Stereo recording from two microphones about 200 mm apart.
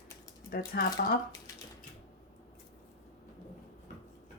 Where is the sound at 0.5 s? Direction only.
50° left (ahead or behind).